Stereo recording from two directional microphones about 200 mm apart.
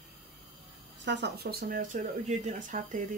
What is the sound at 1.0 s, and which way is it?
Speech, 60° right (ahead or behind).